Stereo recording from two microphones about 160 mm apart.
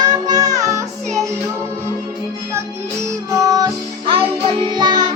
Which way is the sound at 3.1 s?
20° right (ahead or behind).